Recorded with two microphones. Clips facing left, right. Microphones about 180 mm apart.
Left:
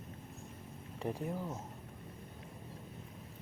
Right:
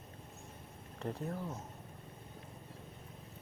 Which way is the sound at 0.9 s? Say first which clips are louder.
Left 2 dB; 15° left (ahead or behind).